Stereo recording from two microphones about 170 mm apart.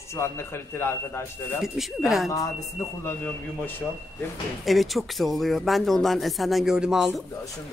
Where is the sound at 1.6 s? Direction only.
Centre (ahead or behind).